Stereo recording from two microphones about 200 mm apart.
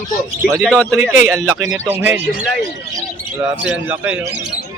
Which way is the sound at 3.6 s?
5° right (ahead or behind).